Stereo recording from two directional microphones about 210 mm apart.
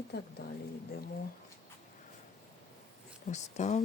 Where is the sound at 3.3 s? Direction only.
35° left (ahead or behind).